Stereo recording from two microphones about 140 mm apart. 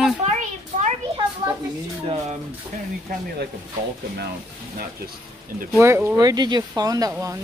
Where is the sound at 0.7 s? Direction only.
70° right (ahead or behind).